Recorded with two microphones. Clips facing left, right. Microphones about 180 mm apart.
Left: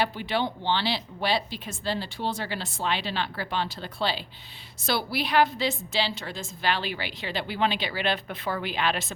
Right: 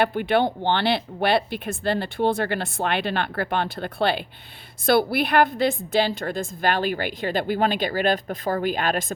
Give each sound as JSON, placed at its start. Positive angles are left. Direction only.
{"t": 0.0, "sound": "a woman's voice", "side_deg": -55}